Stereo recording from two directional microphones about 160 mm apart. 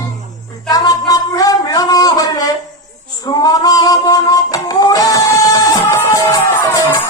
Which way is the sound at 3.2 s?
25° left (ahead or behind).